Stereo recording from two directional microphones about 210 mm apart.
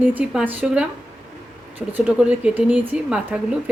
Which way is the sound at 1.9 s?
10° right (ahead or behind).